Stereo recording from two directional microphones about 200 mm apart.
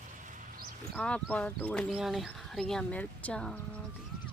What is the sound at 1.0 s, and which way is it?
Speech, 5° left (ahead or behind).